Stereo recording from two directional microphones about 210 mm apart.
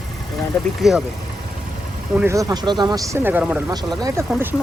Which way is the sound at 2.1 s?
15° right (ahead or behind).